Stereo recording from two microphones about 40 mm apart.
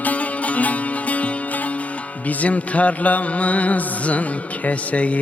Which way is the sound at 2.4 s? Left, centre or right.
Left.